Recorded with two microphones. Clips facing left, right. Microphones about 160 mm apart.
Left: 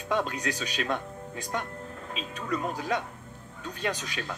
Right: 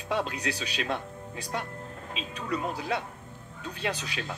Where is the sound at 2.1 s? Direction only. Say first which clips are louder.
Even; 45° left (ahead or behind).